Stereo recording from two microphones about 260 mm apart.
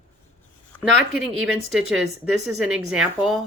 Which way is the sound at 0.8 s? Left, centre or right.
Centre.